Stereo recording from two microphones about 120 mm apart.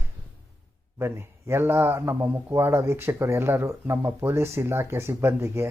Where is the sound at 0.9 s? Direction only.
20° right (ahead or behind).